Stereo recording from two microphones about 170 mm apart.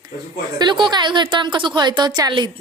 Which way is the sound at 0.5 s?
25° right (ahead or behind).